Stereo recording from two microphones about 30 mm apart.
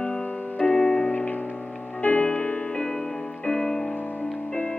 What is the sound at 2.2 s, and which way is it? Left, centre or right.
Music, left.